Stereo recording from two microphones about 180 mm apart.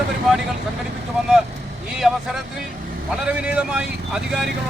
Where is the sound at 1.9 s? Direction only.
Centre (ahead or behind).